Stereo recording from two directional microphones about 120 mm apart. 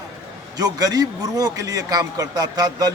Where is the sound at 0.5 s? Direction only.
30° right (ahead or behind).